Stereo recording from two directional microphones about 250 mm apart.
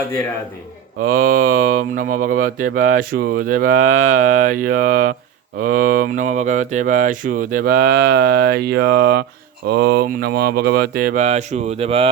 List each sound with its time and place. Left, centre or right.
1.1 s speech: right